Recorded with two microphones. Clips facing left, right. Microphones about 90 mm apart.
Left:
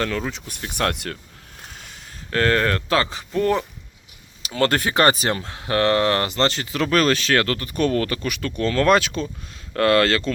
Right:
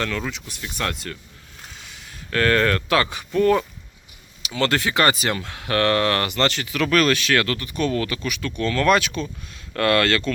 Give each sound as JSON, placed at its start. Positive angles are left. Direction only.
{"t": 0.0, "sound": "speech", "side_deg": 30}
{"t": 0.5, "sound": "speech", "side_deg": 50}
{"t": 1.7, "sound": "speech", "side_deg": 45}
{"t": 4.4, "sound": "speech", "side_deg": 40}